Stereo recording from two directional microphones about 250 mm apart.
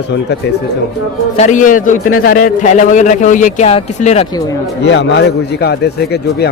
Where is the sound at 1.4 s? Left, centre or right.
Left.